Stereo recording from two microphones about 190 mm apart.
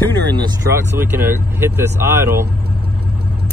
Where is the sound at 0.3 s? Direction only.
20° right (ahead or behind).